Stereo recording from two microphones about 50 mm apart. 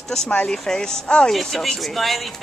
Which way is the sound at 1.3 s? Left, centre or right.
Centre.